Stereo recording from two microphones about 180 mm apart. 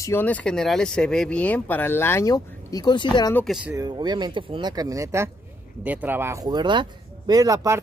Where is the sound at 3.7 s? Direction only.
25° right (ahead or behind).